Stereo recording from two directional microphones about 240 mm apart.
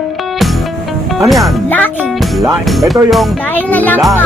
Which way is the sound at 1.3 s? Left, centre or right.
Centre.